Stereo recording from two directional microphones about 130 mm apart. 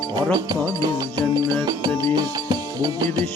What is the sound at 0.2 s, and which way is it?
Music, 30° right (ahead or behind).